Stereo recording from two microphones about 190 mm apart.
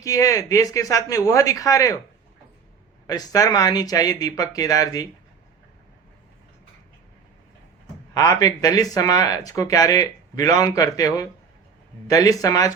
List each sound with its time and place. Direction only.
0.0 s speech: 15° left (ahead or behind)
3.1 s speech: 20° left (ahead or behind)
8.1 s speech: 15° left (ahead or behind)